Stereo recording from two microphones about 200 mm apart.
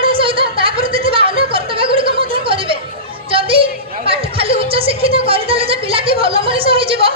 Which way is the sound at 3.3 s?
25° right (ahead or behind).